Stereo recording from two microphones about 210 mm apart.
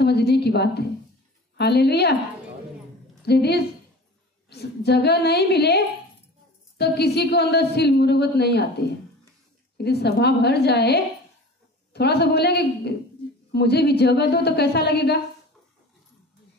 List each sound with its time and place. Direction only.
0.0 s a sound: 50° left (ahead or behind)
1.6 s a woman's voice: 50° left (ahead or behind)
3.2 s a woman's voice: 50° left (ahead or behind)